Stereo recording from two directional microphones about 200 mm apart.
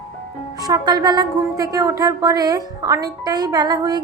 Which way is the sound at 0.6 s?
20° right (ahead or behind).